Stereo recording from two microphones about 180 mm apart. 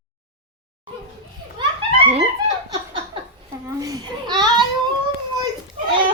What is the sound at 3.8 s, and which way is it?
Babbling, 25° right (ahead or behind).